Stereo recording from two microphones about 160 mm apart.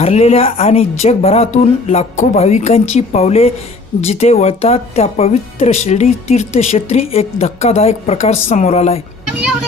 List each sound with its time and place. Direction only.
0.0 s speech: 45° left (ahead or behind)